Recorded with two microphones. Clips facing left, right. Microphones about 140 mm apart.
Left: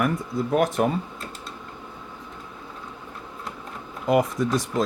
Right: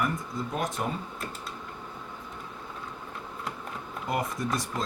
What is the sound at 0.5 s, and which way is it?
Speech, 65° left (ahead or behind).